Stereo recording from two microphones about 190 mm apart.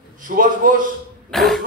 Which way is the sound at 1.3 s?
Centre (ahead or behind).